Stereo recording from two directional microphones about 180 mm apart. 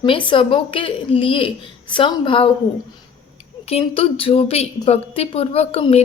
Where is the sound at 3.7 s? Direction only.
30° left (ahead or behind).